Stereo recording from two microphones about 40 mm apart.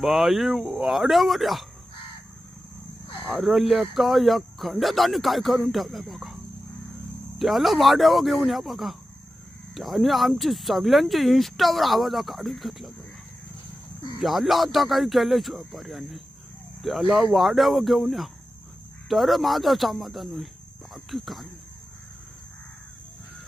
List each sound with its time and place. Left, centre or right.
0.0 s speech: centre
3.3 s speech: centre
14.2 s speech: centre